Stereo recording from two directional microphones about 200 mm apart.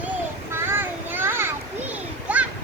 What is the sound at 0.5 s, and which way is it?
Children playing, 10° right (ahead or behind).